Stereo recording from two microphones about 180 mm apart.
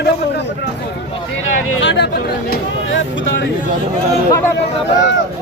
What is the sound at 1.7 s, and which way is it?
Speech, 85° left.